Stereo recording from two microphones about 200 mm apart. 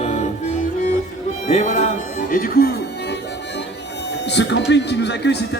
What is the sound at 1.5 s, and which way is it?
Speech, 35° left (ahead or behind).